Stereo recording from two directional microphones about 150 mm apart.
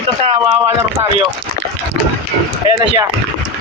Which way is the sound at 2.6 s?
30° right (ahead or behind).